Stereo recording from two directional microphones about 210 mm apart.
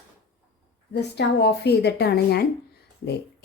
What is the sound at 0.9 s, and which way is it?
A woman's voice, 55° left (ahead or behind).